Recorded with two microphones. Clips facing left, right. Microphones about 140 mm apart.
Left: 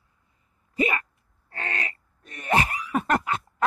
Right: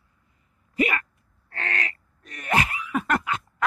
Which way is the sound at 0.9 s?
20° left (ahead or behind).